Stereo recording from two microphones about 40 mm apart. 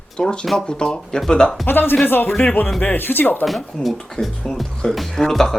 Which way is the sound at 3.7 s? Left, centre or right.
Centre.